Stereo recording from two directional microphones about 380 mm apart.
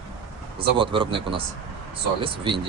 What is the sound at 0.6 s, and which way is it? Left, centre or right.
Speech, centre.